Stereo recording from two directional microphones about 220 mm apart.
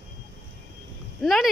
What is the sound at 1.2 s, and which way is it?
Speech, centre (ahead or behind).